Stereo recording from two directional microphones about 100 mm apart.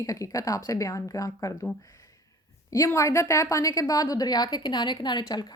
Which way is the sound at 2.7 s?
30° left (ahead or behind).